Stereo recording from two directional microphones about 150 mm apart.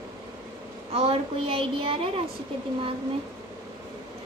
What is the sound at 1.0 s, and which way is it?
A woman's voice, 40° right (ahead or behind).